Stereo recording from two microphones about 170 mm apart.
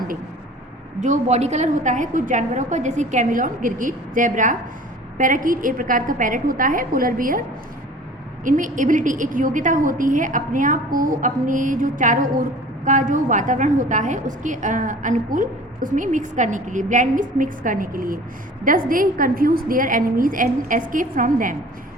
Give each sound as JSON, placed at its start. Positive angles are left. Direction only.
{"t": 1.0, "sound": "a woman's voice", "side_deg": -45}
{"t": 8.4, "sound": "a woman's voice", "side_deg": -50}